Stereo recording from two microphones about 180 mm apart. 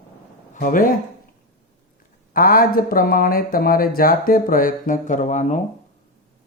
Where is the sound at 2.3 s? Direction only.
50° left (ahead or behind).